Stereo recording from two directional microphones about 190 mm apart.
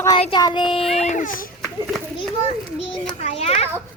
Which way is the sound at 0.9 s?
40° left (ahead or behind).